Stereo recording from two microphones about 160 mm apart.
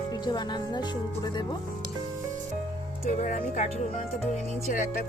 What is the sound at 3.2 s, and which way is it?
Speech, 50° left (ahead or behind).